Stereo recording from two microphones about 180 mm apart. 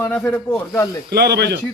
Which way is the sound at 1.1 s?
65° right (ahead or behind).